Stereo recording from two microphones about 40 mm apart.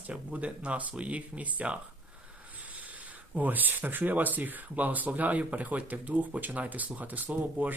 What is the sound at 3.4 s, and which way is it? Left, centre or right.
Speech, right.